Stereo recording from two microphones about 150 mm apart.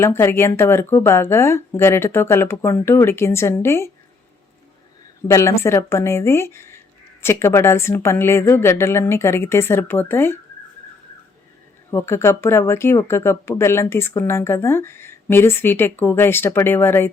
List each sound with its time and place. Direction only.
0.0 s speech: 15° left (ahead or behind)
5.3 s speech: 20° left (ahead or behind)
11.9 s speech: 15° left (ahead or behind)